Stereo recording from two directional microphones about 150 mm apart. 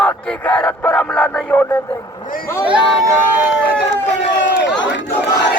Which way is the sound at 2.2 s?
65° left (ahead or behind).